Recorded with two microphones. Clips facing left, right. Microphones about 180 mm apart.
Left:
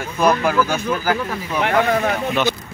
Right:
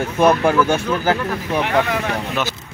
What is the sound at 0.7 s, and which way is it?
Speech, 25° right (ahead or behind).